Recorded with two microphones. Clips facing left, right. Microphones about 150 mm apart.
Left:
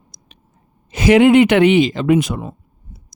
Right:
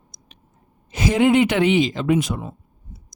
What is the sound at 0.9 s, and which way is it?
A man's voice, 85° left.